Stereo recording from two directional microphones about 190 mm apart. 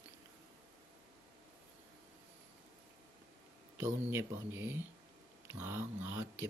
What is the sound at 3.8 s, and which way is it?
Speech, 15° right (ahead or behind).